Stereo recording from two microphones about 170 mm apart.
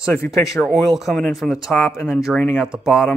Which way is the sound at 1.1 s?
Centre (ahead or behind).